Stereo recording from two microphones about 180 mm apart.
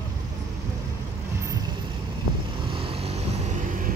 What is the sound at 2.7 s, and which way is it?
Vehicle, 35° right (ahead or behind).